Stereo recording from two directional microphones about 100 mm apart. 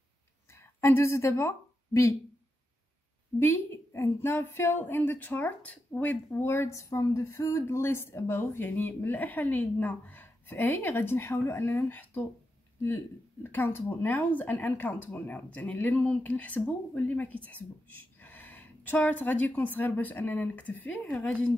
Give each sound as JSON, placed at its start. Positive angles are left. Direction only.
{"t": 0.7, "sound": "a woman's voice", "side_deg": 30}
{"t": 3.3, "sound": "a woman's voice", "side_deg": 25}